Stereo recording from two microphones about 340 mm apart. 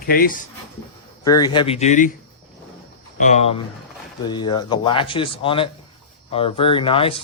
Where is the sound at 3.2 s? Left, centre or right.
Centre.